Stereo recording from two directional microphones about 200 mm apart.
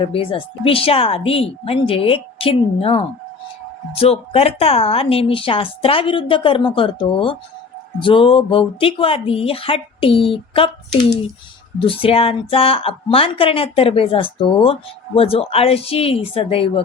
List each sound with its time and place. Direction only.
0.0 s a woman's voice: 25° left (ahead or behind)
11.8 s a woman's voice: 25° left (ahead or behind)